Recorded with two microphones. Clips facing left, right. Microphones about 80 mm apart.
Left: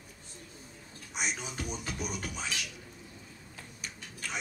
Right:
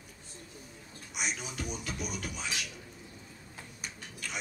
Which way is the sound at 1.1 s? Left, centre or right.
Left.